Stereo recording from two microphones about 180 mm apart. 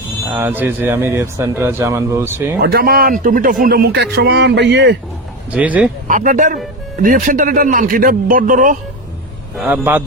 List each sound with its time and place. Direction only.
0.3 s speech: 10° right (ahead or behind)
2.6 s speech: 60° right (ahead or behind); by 4.9 s 75° right (ahead or behind)
5.5 s speech: 10° right (ahead or behind)
6.1 s a man's voice: 45° right (ahead or behind)
9.6 s speech: 10° right (ahead or behind)